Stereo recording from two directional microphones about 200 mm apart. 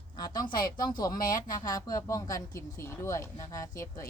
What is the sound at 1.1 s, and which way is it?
Speech, 45° left (ahead or behind).